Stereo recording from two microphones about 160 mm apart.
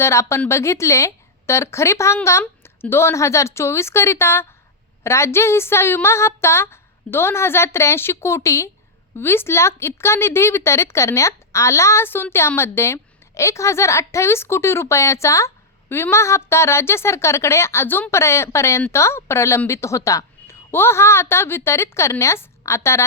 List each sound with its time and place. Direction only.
0.0 s a woman's voice: 15° left (ahead or behind)